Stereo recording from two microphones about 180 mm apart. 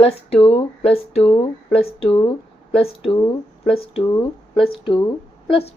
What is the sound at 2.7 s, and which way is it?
A woman's voice, 30° left (ahead or behind).